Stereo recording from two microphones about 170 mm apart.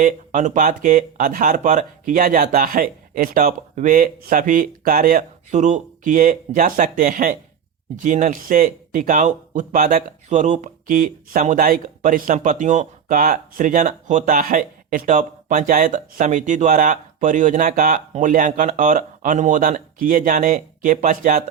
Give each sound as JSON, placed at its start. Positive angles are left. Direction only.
{"t": 0.0, "sound": "speech", "side_deg": -50}